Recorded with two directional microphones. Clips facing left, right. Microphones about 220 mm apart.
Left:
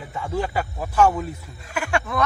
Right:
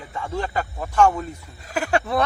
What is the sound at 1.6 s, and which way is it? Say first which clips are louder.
Speech: right 3 dB; 35° right (ahead or behind).